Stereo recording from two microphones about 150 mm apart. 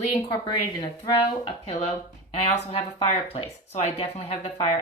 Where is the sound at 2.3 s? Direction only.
40° left (ahead or behind).